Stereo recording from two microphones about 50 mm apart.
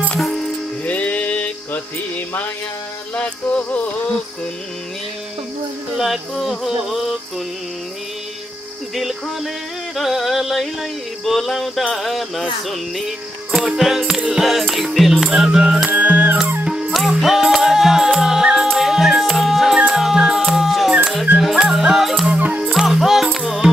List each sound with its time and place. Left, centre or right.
0.8 s music: left
3.2 s music: left
5.9 s a sound: centre
8.9 s music: centre
9.9 s a sound: centre
15.0 s music: centre; by 16.3 s right
16.8 s music: centre